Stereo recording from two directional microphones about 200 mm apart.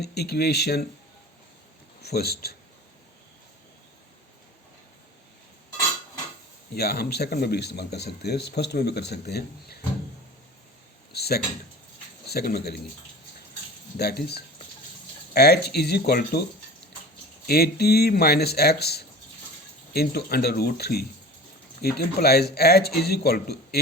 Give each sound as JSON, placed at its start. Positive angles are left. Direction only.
{"t": 0.0, "sound": "speech", "side_deg": 55}
{"t": 2.0, "sound": "a man's voice", "side_deg": 55}
{"t": 6.7, "sound": "speech", "side_deg": 50}
{"t": 11.1, "sound": "a sound", "side_deg": 55}
{"t": 12.2, "sound": "speech", "side_deg": 50}
{"t": 13.9, "sound": "speech", "side_deg": 50}
{"t": 17.4, "sound": "speech", "side_deg": 50}